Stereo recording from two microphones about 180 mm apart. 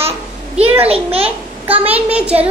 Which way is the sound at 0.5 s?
10° right (ahead or behind).